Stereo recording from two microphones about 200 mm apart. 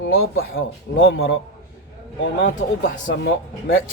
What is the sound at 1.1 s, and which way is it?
Speech, 55° left (ahead or behind).